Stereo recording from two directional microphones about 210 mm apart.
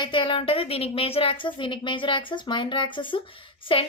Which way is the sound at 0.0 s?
25° left (ahead or behind).